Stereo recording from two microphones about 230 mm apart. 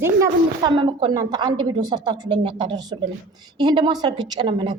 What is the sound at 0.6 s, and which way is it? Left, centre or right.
A woman's voice, centre.